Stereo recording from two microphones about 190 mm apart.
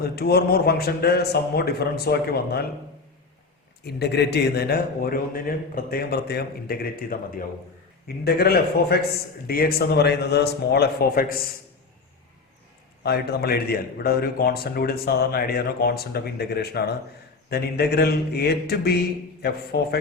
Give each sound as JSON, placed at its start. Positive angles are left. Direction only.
{"t": 0.0, "sound": "a man's voice", "side_deg": 55}
{"t": 3.8, "sound": "a man's voice", "side_deg": 60}
{"t": 13.0, "sound": "a man's voice", "side_deg": 55}